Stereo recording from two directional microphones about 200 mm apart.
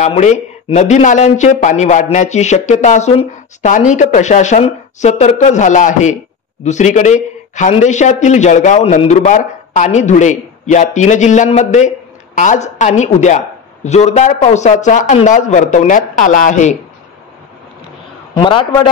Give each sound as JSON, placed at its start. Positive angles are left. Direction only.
{"t": 0.0, "sound": "a man's voice", "side_deg": 35}
{"t": 18.3, "sound": "a man's voice", "side_deg": 25}